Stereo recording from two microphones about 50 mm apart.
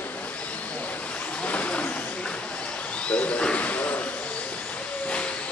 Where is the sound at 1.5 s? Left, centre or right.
Left.